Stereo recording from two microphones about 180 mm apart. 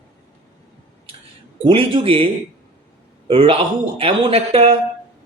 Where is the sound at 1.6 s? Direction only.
30° right (ahead or behind).